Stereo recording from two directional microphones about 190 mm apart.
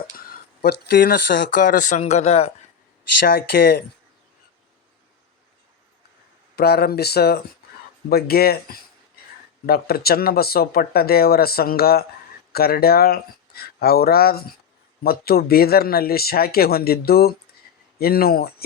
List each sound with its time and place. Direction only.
0.6 s speech: 60° left (ahead or behind)
1.5 s speech: 45° left (ahead or behind)
3.2 s speech: 55° left (ahead or behind)
6.6 s speech: 55° left (ahead or behind)